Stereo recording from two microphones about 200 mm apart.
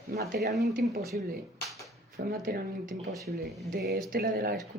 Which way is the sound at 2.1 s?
50° right (ahead or behind).